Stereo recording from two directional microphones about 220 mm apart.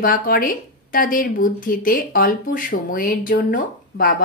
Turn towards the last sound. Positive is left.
turn(degrees=40)  # may be behind; listen again after turning